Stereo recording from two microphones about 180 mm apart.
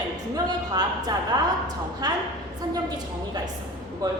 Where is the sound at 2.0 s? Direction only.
20° right (ahead or behind).